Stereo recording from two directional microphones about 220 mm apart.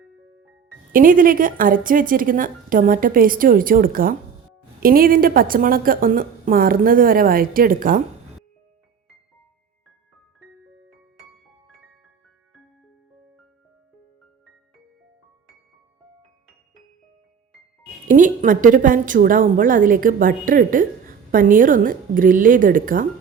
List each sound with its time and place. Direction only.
0.9 s a woman's voice: 40° right (ahead or behind)
18.1 s a woman's voice: 35° right (ahead or behind)